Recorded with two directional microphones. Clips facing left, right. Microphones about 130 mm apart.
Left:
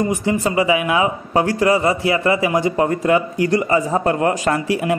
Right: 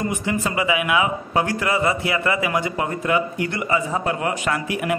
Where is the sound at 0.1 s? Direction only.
35° left (ahead or behind).